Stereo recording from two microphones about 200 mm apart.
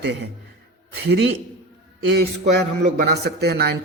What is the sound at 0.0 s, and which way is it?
Speech, 60° right (ahead or behind).